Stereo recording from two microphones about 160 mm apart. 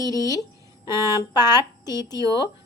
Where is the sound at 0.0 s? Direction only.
20° left (ahead or behind).